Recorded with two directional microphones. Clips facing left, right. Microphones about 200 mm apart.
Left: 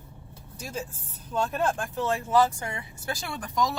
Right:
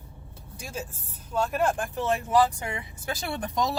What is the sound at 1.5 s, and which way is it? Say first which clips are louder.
Speech: right 1 dB; 15° right (ahead or behind).